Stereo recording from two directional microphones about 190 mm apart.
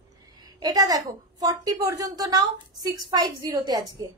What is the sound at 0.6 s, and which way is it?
A woman's voice, 20° right (ahead or behind).